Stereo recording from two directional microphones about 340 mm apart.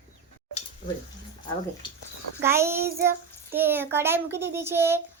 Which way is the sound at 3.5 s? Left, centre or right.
Centre.